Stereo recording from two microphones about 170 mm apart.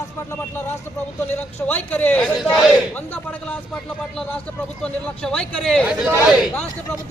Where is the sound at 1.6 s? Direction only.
10° left (ahead or behind).